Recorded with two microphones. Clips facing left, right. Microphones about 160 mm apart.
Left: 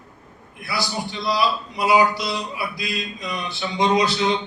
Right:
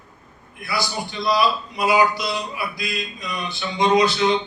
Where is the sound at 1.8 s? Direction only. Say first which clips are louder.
Left 1 dB; 30° left (ahead or behind).